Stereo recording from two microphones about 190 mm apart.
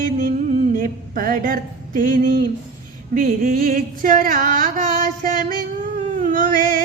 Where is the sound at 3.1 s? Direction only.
50° right (ahead or behind).